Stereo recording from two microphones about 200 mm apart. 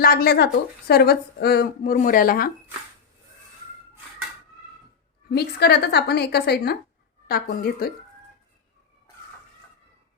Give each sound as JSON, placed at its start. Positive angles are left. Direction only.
{"t": 0.0, "sound": "speech", "side_deg": 50}
{"t": 5.3, "sound": "speech", "side_deg": 55}